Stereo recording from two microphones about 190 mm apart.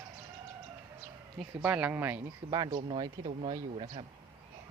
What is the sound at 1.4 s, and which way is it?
Speech, 5° right (ahead or behind).